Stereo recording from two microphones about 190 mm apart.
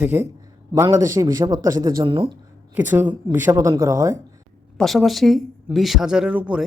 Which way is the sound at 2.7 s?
10° right (ahead or behind).